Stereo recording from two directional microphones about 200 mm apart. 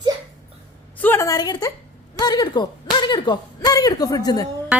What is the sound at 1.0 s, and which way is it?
A woman's voice, 10° left (ahead or behind).